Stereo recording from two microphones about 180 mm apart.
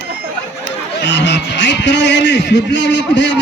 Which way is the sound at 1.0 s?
80° left.